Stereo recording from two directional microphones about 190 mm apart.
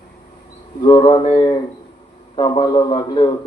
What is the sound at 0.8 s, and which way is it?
Speech, 25° left (ahead or behind).